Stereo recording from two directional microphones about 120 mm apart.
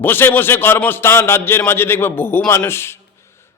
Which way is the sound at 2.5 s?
20° left (ahead or behind).